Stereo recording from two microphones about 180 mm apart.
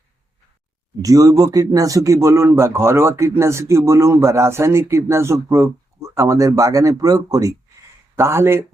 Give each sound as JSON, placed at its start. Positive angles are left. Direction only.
{"t": 1.0, "sound": "a man's voice", "side_deg": -20}